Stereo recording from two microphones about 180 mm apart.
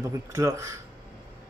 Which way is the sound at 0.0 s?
15° right (ahead or behind).